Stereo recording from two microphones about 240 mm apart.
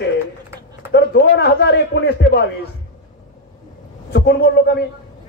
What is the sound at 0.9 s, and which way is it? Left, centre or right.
A man's voice, left.